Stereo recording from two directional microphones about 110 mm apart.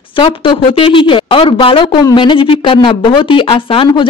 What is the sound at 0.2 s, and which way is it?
A woman's voice, 55° left (ahead or behind).